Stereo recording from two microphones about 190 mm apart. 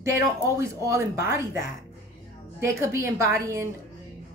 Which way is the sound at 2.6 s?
15° right (ahead or behind).